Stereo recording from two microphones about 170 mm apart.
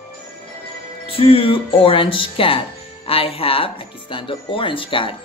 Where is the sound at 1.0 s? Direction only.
30° left (ahead or behind).